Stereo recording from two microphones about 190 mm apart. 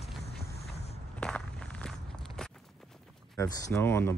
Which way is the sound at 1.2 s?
5° left (ahead or behind).